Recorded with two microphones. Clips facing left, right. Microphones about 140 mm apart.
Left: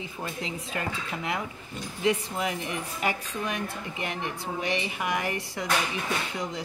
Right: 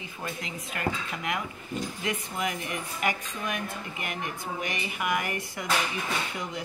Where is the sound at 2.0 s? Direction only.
30° left (ahead or behind).